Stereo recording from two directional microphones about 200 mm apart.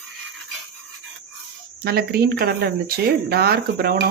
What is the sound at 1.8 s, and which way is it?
Speech, 50° right (ahead or behind).